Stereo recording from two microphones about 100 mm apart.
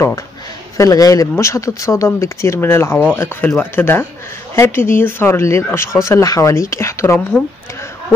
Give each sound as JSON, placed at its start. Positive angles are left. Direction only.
{"t": 0.7, "sound": "speech", "side_deg": 35}